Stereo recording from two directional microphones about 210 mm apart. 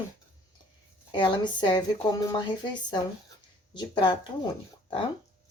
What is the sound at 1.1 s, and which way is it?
Speech, 20° left (ahead or behind).